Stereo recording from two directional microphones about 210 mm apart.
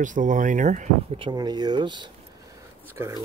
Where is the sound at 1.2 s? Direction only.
20° right (ahead or behind).